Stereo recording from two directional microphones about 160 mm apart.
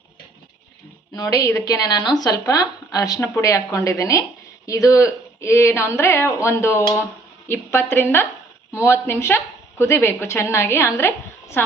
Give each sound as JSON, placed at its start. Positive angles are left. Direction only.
{"t": 1.1, "sound": "a woman's voice", "side_deg": 20}